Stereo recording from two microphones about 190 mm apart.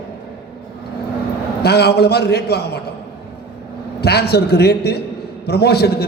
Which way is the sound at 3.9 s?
60° left (ahead or behind).